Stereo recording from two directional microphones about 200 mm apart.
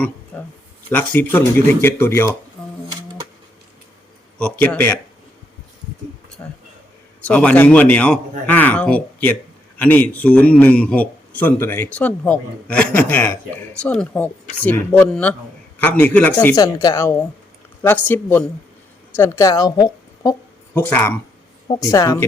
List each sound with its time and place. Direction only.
0.3 s a man's voice: 10° left (ahead or behind)
4.6 s a man's voice: 10° left (ahead or behind)
6.4 s a man's voice: 10° left (ahead or behind)